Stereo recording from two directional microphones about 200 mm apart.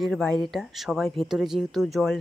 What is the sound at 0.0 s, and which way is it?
Speech, 5° left (ahead or behind).